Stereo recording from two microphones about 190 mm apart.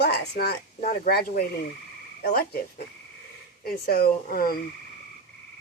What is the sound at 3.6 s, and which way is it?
Speech, 55° left (ahead or behind).